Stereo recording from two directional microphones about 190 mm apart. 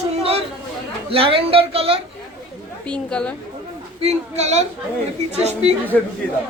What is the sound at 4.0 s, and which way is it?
Speech, 35° right (ahead or behind).